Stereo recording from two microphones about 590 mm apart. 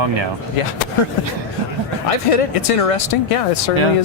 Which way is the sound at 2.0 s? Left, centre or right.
Left.